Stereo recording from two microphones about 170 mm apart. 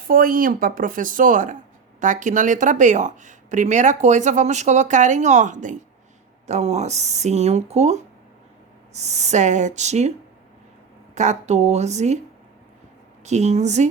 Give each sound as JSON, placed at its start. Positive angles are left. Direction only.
{"t": 0.1, "sound": "speech", "side_deg": -55}
{"t": 11.1, "sound": "speech", "side_deg": -45}
{"t": 13.2, "sound": "speech", "side_deg": -40}